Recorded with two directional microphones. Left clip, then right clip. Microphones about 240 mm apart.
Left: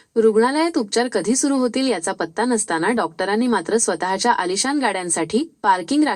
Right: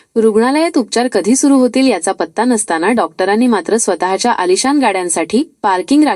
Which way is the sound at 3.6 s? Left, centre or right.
Right.